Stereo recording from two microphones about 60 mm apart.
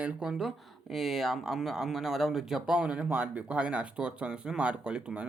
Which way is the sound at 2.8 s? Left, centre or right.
Centre.